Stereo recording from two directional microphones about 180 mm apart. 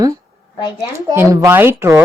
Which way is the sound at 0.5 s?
20° left (ahead or behind).